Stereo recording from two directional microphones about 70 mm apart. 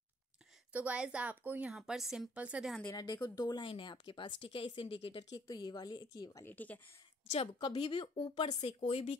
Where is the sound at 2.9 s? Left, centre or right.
Left.